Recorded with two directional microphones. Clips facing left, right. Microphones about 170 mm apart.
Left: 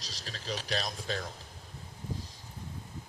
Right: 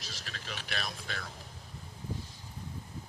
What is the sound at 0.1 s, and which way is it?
Speech, 35° left (ahead or behind).